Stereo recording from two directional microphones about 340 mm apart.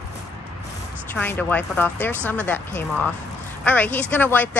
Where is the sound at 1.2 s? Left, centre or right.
Centre.